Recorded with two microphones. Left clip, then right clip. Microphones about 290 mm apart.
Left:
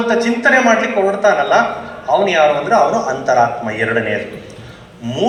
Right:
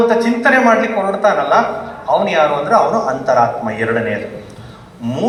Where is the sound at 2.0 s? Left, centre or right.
Right.